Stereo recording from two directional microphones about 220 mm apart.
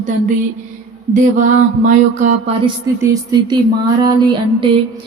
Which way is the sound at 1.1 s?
35° right (ahead or behind).